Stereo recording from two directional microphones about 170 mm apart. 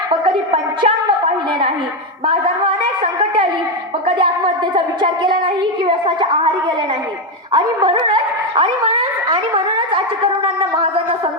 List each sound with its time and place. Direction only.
0.1 s a woman's voice: 30° right (ahead or behind)
4.7 s a woman's voice: 30° right (ahead or behind)
7.5 s dog: 30° right (ahead or behind)